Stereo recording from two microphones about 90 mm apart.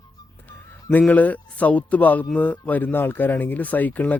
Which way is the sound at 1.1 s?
15° left (ahead or behind).